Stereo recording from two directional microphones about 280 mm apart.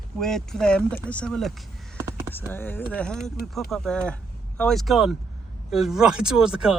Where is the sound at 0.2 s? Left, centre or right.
Centre.